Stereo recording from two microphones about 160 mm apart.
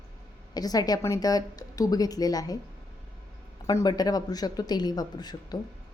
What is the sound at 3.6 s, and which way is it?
A woman's voice, 25° left (ahead or behind).